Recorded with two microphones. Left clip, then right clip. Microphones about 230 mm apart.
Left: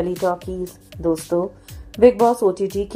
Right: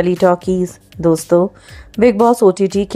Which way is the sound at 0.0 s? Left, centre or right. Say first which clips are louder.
Right 9 dB; right.